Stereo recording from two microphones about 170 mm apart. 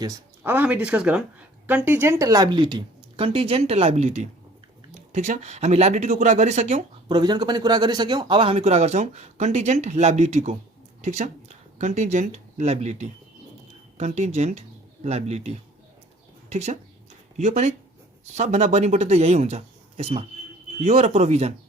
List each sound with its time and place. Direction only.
0.4 s speech: 10° right (ahead or behind); by 6.8 s 40° right (ahead or behind)
7.1 s speech: 25° right (ahead or behind)